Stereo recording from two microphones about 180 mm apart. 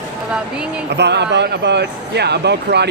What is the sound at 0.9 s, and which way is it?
Speech, 70° right (ahead or behind).